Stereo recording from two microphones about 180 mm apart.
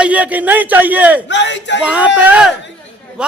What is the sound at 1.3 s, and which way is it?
Speech, 80° left.